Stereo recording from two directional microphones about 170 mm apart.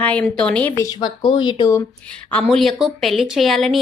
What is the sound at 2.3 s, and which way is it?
Speech, 5° left (ahead or behind).